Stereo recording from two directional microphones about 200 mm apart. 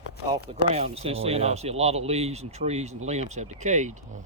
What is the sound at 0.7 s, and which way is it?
Speech, 30° right (ahead or behind).